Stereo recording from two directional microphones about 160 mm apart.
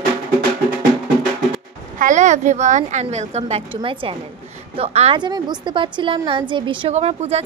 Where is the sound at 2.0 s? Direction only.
50° right (ahead or behind).